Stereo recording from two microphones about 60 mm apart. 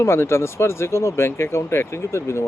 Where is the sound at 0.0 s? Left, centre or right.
Left.